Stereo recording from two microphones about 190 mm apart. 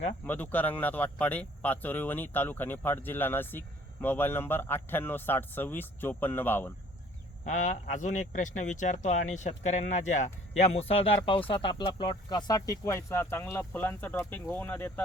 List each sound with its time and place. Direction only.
0.3 s speech: 10° left (ahead or behind)
7.4 s a man's voice: 40° left (ahead or behind); by 15.0 s 10° left (ahead or behind)